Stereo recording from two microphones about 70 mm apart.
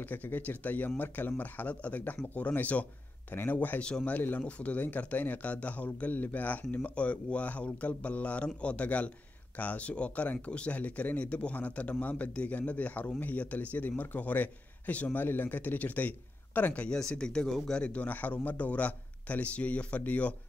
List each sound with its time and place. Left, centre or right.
0.0 s a man's voice: left